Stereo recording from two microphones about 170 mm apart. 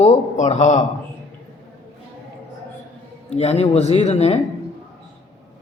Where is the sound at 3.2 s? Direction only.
40° left (ahead or behind).